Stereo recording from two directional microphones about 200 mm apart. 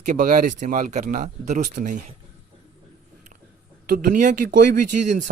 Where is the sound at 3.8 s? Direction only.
45° right (ahead or behind).